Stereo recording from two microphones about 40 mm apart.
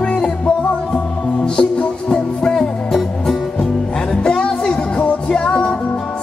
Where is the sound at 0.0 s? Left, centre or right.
Left.